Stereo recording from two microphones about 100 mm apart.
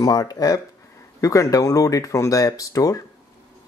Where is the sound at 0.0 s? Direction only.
40° left (ahead or behind).